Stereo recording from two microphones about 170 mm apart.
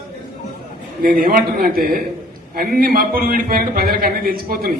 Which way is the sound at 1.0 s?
55° right (ahead or behind).